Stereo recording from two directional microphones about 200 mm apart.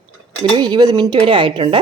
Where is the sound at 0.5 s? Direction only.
20° right (ahead or behind).